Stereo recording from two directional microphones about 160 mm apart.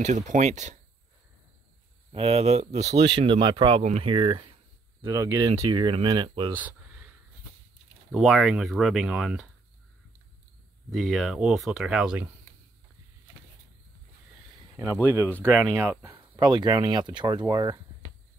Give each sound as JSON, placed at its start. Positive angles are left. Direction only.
{"t": 0.0, "sound": "speech", "side_deg": -50}
{"t": 2.1, "sound": "speech", "side_deg": -40}
{"t": 3.3, "sound": "speech", "side_deg": -30}
{"t": 3.8, "sound": "speech", "side_deg": -45}
{"t": 4.1, "sound": "speech", "side_deg": -30}
{"t": 8.1, "sound": "speech", "side_deg": 0}
{"t": 10.9, "sound": "speech", "side_deg": 0}
{"t": 15.2, "sound": "speech", "side_deg": 10}
{"t": 15.7, "sound": "speech", "side_deg": -15}